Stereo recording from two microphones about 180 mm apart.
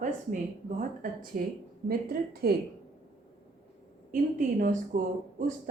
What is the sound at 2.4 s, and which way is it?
Speech, 60° right (ahead or behind).